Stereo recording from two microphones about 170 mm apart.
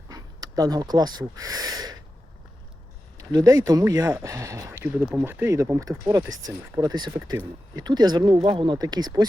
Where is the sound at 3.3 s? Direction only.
20° right (ahead or behind).